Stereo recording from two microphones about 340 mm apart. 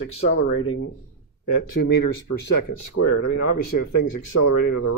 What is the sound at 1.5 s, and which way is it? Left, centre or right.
Speech, left.